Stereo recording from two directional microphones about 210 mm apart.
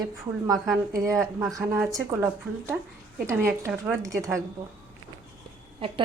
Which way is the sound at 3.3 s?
10° right (ahead or behind).